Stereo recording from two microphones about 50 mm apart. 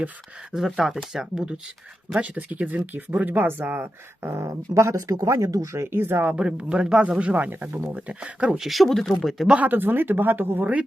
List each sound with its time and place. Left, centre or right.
0.5 s speech: centre
2.2 s speech: right
6.3 s speech: centre
8.5 s speech: centre
9.6 s speech: right
10.6 s speech: right